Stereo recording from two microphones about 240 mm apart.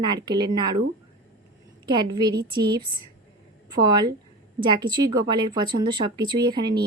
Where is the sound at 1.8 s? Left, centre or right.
Centre.